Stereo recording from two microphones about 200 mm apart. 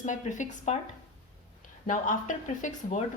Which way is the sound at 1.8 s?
40° left (ahead or behind).